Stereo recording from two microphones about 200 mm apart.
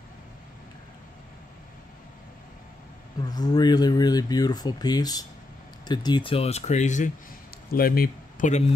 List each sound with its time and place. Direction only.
3.2 s speech: 20° left (ahead or behind); by 7.1 s 35° left (ahead or behind)
7.7 s speech: 50° left (ahead or behind)